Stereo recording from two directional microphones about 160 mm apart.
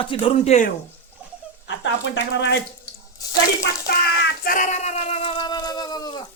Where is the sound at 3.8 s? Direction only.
75° left (ahead or behind); by 6.2 s 25° left (ahead or behind).